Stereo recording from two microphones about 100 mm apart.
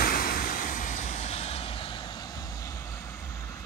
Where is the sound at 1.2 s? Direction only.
90° left; by 2.7 s 40° left (ahead or behind).